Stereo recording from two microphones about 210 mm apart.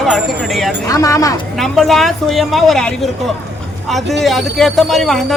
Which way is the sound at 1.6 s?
Centre (ahead or behind).